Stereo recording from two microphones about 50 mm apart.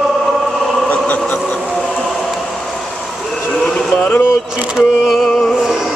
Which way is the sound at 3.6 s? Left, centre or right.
Left.